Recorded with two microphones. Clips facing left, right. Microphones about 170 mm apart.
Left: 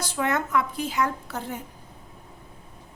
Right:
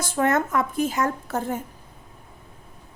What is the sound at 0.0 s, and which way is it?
A woman's voice, 50° right (ahead or behind).